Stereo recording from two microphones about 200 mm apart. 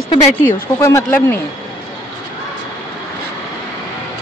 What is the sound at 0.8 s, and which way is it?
Speech, 10° left (ahead or behind).